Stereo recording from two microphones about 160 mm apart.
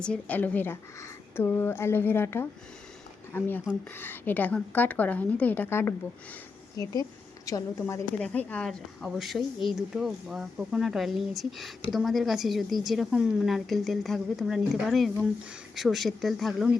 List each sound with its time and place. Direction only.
0.0 s a woman's voice: 10° left (ahead or behind)